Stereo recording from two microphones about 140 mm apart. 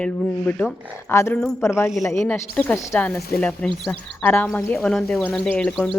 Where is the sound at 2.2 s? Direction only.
10° left (ahead or behind).